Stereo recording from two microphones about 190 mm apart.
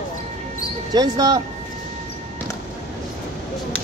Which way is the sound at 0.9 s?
20° right (ahead or behind).